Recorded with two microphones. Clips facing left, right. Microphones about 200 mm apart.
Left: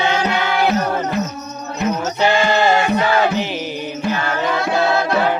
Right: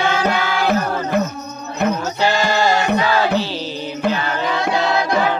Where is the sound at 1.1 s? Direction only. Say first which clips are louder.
Right 3 dB; 50° right (ahead or behind).